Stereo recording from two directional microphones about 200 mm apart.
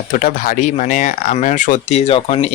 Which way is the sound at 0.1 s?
40° left (ahead or behind).